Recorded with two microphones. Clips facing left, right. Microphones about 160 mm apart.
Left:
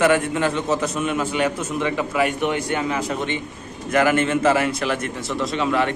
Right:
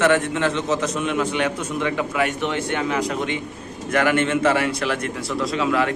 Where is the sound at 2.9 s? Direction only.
Centre (ahead or behind).